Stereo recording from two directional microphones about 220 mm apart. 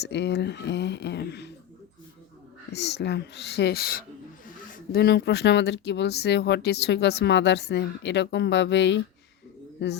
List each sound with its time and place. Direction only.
0.0 s speech: 50° left (ahead or behind)
2.7 s speech: 50° left (ahead or behind)